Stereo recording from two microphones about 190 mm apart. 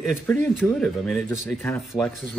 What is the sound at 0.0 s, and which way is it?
Speech, 5° left (ahead or behind).